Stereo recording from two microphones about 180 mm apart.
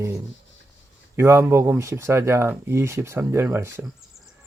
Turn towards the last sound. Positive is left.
turn(degrees=-15)  # may be behind; listen again after turning